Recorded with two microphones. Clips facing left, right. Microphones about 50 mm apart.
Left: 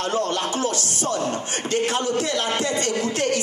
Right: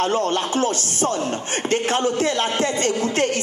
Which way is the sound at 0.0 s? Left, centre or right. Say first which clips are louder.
Right 3 dB; right.